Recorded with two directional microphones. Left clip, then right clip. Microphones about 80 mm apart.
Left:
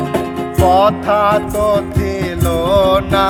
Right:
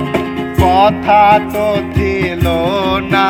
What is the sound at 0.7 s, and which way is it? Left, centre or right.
Music, left.